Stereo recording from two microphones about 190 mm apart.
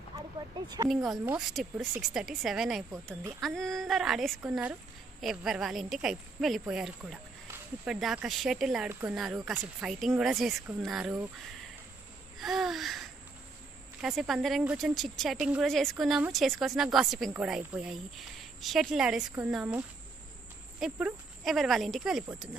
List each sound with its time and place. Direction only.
0.6 s speech: 20° right (ahead or behind)
0.8 s speech: centre (ahead or behind)
2.9 s speech: 15° right (ahead or behind)
3.3 s speech: centre (ahead or behind)
12.4 s a sound: centre (ahead or behind)
14.0 s speech: centre (ahead or behind)
20.8 s speech: centre (ahead or behind)